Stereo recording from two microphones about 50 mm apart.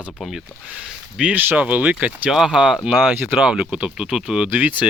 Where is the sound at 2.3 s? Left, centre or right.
Centre.